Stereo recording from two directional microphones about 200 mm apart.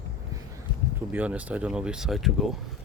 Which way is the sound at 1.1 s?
5° right (ahead or behind).